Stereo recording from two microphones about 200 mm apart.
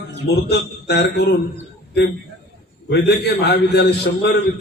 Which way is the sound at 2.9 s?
55° left (ahead or behind).